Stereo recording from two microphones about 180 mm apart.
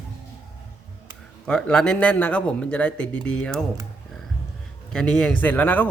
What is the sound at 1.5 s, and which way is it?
Speech, 5° left (ahead or behind).